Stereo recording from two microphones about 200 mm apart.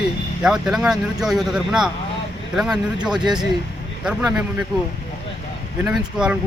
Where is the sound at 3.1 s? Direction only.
20° right (ahead or behind).